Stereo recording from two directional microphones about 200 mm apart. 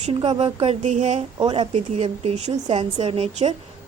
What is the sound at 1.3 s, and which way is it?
Speech, 25° right (ahead or behind).